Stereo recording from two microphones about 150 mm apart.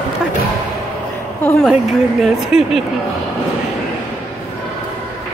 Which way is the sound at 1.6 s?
Centre (ahead or behind).